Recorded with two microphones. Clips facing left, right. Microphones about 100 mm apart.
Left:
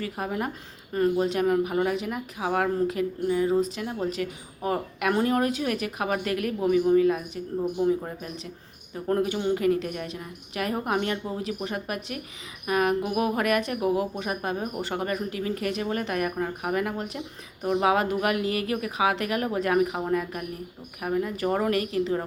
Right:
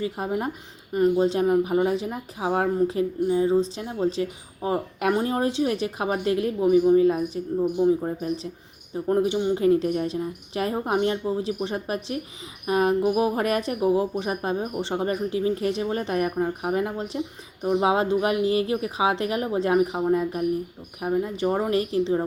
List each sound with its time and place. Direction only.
0.0 s speech: 25° right (ahead or behind)
9.0 s speech: 20° right (ahead or behind)